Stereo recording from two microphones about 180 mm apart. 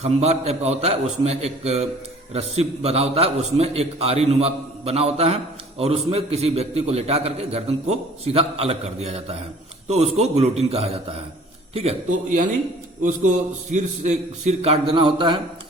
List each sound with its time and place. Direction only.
0.0 s a man's voice: 35° right (ahead or behind)
13.0 s a man's voice: 45° right (ahead or behind); by 15.4 s 25° right (ahead or behind)